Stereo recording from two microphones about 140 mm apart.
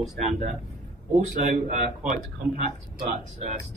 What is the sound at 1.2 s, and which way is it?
Speech, 65° right (ahead or behind).